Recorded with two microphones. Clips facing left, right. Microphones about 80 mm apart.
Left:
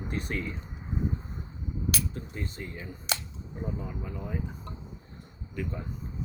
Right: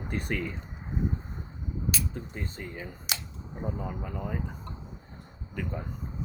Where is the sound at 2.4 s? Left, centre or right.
Right.